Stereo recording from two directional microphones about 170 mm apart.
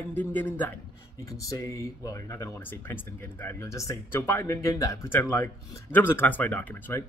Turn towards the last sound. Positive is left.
turn(degrees=10)  # may be behind; listen again after turning